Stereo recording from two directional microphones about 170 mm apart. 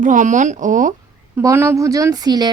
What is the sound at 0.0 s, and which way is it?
Speech, 50° right (ahead or behind).